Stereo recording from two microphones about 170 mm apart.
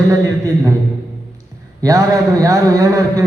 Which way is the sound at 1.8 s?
20° right (ahead or behind).